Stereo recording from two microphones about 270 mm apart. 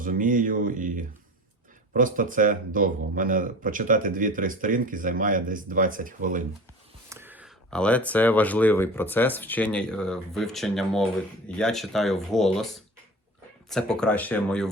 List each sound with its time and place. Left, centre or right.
0.0 s speech: right
7.1 s speech: centre
13.7 s speech: centre